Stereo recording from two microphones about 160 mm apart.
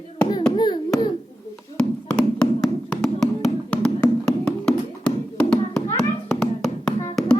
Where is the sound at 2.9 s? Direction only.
5° left (ahead or behind).